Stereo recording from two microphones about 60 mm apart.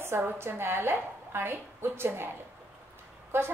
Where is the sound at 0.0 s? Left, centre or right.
Right.